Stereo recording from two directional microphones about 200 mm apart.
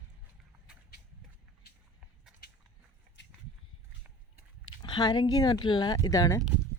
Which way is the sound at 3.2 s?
65° left (ahead or behind).